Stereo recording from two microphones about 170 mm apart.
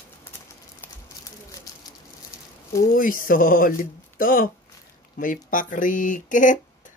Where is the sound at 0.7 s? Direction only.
20° left (ahead or behind).